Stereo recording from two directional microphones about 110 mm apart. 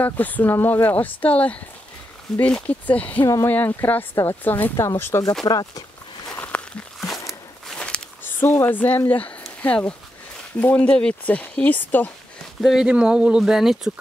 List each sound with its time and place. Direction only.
0.0 s speech: 15° left (ahead or behind)
5.4 s speech: 35° left (ahead or behind)
6.3 s a sound: 15° left (ahead or behind)
7.0 s a sound: centre (ahead or behind); by 8.7 s 20° left (ahead or behind)
8.7 s speech: 15° left (ahead or behind)
12.6 s speech: 5° right (ahead or behind)